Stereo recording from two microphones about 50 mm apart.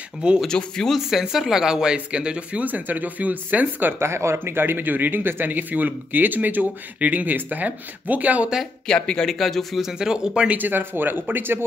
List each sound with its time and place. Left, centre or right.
0.5 s speech: centre
1.2 s speech: centre
2.0 s speech: right
2.6 s speech: right
4.0 s speech: right
4.6 s speech: right
8.8 s speech: centre
9.8 s speech: centre
10.6 s speech: right